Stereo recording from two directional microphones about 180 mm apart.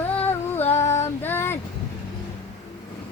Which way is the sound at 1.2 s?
10° left (ahead or behind).